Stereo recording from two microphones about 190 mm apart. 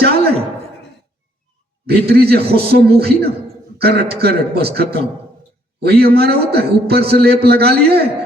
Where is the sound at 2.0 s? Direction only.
55° right (ahead or behind).